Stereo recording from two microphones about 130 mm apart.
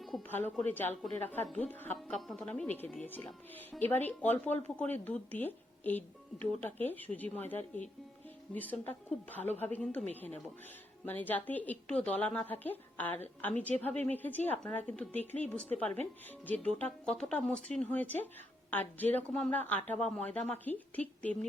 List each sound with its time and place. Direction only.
0.2 s a woman's voice: 15° left (ahead or behind)
16.5 s a woman's voice: 10° left (ahead or behind)